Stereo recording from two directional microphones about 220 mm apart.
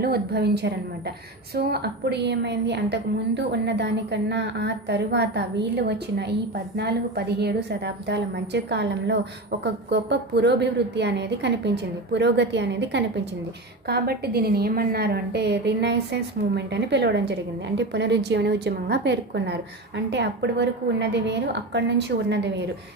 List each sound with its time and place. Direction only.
0.0 s a woman's voice: 45° right (ahead or behind)